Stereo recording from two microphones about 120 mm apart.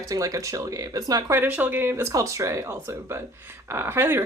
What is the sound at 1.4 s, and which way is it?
Speech, 15° right (ahead or behind).